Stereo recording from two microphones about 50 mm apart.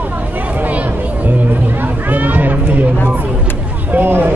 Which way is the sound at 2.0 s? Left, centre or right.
Right.